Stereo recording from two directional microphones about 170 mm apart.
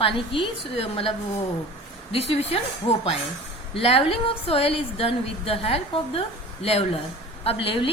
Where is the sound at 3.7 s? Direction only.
35° left (ahead or behind).